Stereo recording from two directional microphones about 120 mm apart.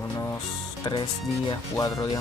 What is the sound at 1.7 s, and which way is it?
Speech, 30° left (ahead or behind).